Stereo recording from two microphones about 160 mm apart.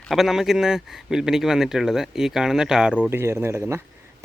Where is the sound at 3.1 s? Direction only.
15° right (ahead or behind).